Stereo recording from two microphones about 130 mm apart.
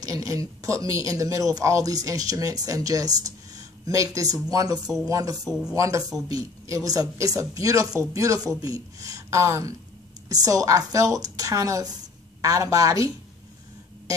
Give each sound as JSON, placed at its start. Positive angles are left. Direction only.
{"t": 0.0, "sound": "speech", "side_deg": -25}
{"t": 5.4, "sound": "speech", "side_deg": -5}
{"t": 5.8, "sound": "speech", "side_deg": -25}